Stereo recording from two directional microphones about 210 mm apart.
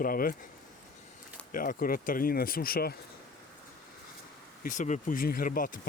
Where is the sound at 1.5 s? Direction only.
40° left (ahead or behind).